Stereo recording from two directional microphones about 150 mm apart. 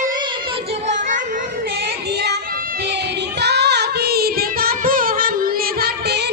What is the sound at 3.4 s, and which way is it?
Music, 90° right.